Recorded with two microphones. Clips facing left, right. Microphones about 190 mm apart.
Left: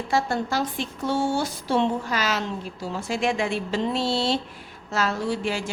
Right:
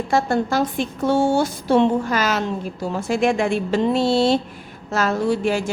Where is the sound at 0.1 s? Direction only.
50° right (ahead or behind).